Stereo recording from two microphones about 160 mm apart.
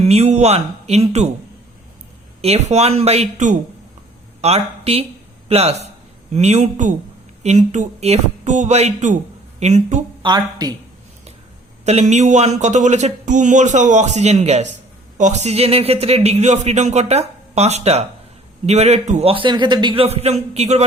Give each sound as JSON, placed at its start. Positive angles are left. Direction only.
{"t": 0.0, "sound": "speech", "side_deg": -40}
{"t": 2.4, "sound": "speech", "side_deg": -40}
{"t": 10.2, "sound": "a woman's voice", "side_deg": -25}
{"t": 11.9, "sound": "speech", "side_deg": -45}
{"t": 19.3, "sound": "speech", "side_deg": -30}